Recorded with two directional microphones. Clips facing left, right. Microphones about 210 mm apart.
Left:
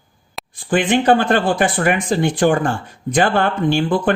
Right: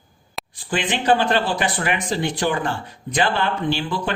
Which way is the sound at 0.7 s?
50° left (ahead or behind).